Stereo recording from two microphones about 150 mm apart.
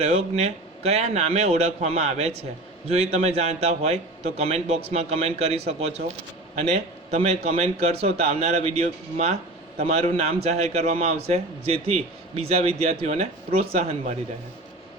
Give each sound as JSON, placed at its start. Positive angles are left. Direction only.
{"t": 0.0, "sound": "a man's voice", "side_deg": -45}